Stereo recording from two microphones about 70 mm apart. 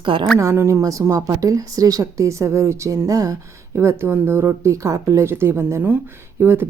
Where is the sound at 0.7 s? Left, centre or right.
Right.